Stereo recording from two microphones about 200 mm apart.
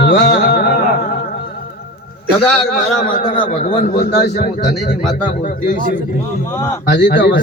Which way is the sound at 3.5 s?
45° left (ahead or behind).